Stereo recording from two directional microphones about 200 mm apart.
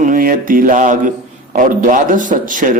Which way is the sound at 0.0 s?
45° right (ahead or behind).